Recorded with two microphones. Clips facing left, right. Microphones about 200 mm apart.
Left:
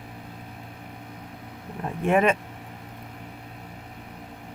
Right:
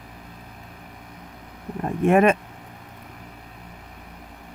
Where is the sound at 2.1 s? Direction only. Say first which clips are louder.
Right 4 dB; 50° right (ahead or behind).